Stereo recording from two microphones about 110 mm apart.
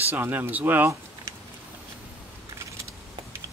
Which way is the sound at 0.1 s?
20° right (ahead or behind).